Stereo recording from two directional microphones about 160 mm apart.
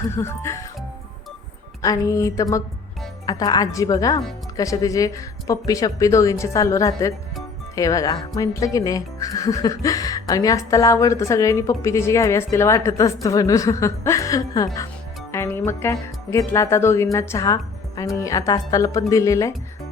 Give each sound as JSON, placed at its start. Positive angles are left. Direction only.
{"t": 0.1, "sound": "speech", "side_deg": 15}
{"t": 1.8, "sound": "speech", "side_deg": 20}